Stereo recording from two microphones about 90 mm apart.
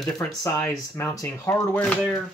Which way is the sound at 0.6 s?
30° left (ahead or behind).